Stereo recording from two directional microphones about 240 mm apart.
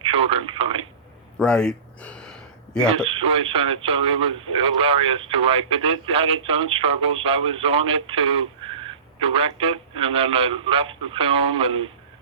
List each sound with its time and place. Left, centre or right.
0.0 s speech: right
1.4 s a sound: centre
3.1 s speech: right